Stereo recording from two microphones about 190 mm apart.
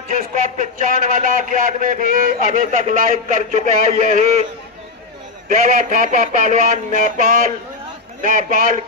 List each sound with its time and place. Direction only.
0.1 s a man's voice: 45° right (ahead or behind)
5.5 s a man's voice: 40° right (ahead or behind)
6.5 s a sound: 40° right (ahead or behind)
7.1 s a man's voice: 45° right (ahead or behind)